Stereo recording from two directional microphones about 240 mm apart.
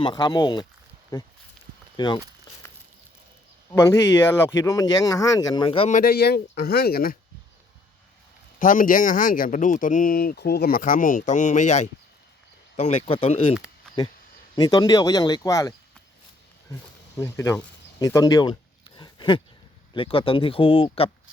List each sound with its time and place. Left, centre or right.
0.0 s speech: centre
3.7 s speech: centre
6.0 s speech: left
8.5 s speech: left; by 15.7 s centre
17.2 s speech: centre
18.9 s a sound: centre
19.9 s speech: left